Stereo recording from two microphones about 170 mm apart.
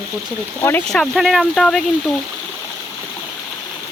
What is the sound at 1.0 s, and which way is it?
Speech, centre (ahead or behind).